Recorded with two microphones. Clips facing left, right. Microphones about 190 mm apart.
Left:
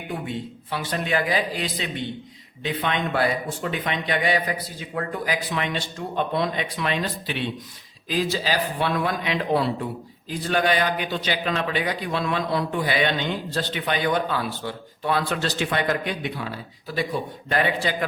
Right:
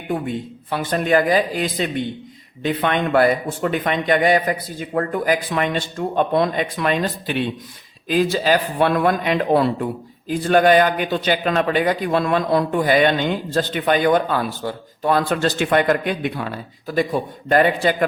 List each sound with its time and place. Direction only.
0.3 s a man's voice: 50° right (ahead or behind)